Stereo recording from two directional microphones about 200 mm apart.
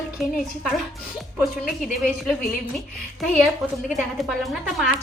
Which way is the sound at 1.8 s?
Centre (ahead or behind).